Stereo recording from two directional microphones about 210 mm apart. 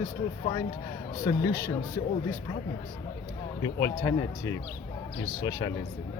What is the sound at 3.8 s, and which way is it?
Speech, 15° left (ahead or behind).